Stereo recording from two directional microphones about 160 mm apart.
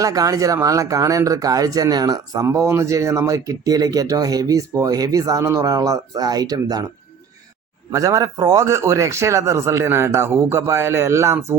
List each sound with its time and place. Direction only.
0.0 s speech: 20° right (ahead or behind)
7.9 s speech: 20° right (ahead or behind)